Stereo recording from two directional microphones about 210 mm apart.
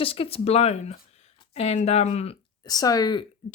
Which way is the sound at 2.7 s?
20° left (ahead or behind).